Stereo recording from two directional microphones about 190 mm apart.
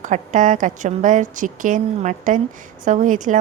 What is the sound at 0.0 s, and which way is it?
A woman's voice, 40° right (ahead or behind).